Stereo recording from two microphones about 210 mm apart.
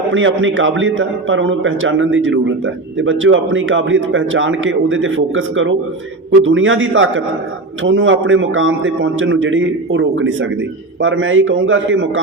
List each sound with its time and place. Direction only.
0.1 s a man's voice: 65° right (ahead or behind)